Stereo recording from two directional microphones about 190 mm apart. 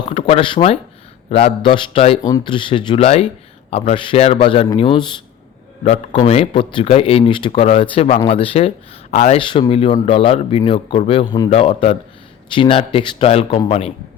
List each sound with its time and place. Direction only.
0.1 s a man's voice: 30° left (ahead or behind)